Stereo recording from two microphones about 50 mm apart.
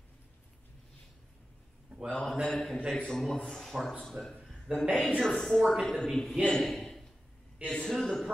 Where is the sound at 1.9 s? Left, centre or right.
Centre.